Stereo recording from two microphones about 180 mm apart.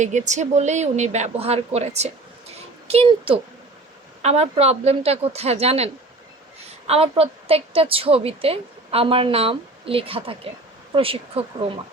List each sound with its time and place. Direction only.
0.0 s a woman's voice: 40° right (ahead or behind)